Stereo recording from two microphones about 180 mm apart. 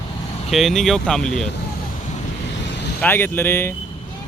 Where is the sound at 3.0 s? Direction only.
10° left (ahead or behind).